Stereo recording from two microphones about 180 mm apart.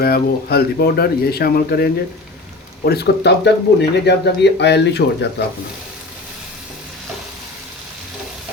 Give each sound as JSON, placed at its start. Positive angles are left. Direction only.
{"t": 0.0, "sound": "speech", "side_deg": 60}